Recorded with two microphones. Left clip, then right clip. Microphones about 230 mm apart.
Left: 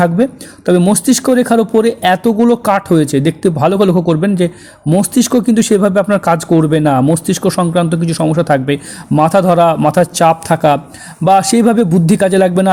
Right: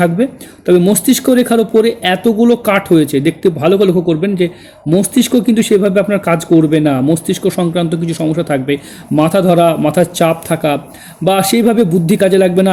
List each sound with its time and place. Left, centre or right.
0.0 s a man's voice: centre